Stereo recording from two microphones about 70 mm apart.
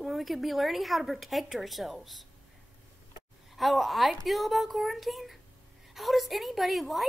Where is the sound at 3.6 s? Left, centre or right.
Centre.